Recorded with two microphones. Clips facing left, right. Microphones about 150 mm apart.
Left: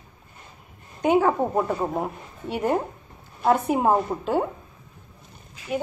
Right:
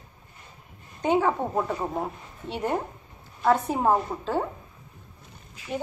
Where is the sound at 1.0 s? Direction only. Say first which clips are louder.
Left 3 dB; 10° left (ahead or behind).